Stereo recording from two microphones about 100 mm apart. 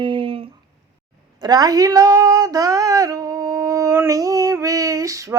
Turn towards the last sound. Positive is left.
turn(degrees=-35)  # may be behind; listen again after turning